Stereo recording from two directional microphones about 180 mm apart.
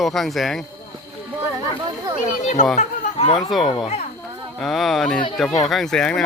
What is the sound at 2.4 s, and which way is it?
Speech, 45° left (ahead or behind).